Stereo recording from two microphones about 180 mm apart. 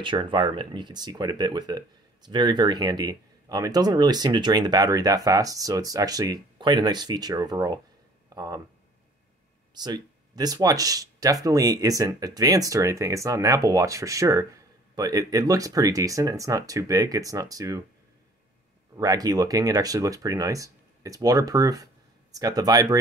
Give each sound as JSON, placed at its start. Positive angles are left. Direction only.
{"t": 0.0, "sound": "speech", "side_deg": -25}
{"t": 9.8, "sound": "speech", "side_deg": -25}
{"t": 18.9, "sound": "speech", "side_deg": -20}